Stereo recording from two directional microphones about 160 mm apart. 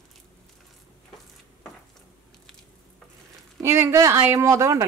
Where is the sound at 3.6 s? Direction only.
20° right (ahead or behind).